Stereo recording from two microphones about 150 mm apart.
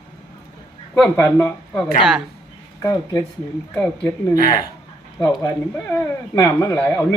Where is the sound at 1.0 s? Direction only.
15° left (ahead or behind).